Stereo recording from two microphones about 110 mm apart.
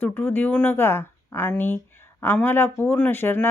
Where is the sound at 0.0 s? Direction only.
20° left (ahead or behind).